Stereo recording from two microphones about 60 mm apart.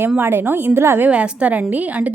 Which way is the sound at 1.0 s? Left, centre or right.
Right.